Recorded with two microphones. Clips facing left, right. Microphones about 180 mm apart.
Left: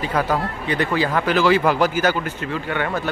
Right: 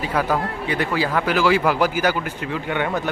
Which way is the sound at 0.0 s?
5° right (ahead or behind).